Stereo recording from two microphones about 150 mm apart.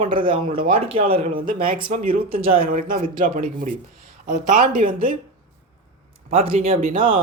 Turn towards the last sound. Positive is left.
turn(degrees=-55)  # may be behind; listen again after turning